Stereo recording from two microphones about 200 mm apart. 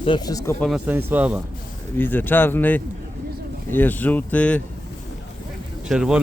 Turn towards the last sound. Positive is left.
turn(degrees=-5)  # may be behind; listen again after turning